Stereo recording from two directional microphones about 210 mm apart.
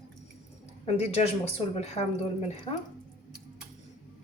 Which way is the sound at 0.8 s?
30° left (ahead or behind).